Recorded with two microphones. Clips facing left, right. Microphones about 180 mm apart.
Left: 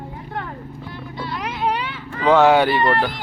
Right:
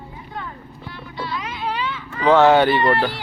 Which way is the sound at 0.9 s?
55° left (ahead or behind).